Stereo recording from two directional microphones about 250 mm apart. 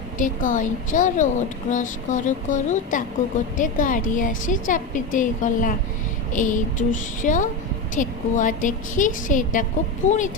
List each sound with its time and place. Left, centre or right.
0.2 s a woman's voice: left